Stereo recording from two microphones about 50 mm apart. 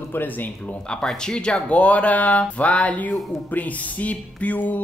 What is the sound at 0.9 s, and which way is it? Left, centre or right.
Speech, centre.